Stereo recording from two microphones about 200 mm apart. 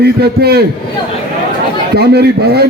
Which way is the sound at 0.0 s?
50° right (ahead or behind).